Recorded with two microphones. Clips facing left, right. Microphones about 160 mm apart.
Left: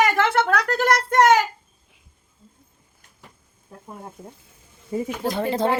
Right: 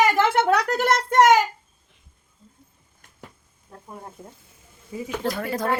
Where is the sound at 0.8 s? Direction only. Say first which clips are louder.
Left 1 dB; 25° right (ahead or behind).